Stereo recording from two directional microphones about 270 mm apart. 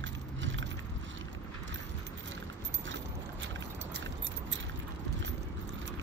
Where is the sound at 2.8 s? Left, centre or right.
Right.